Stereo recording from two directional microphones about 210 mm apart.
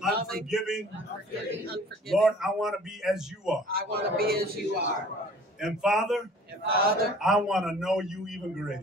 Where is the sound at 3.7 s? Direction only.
45° right (ahead or behind).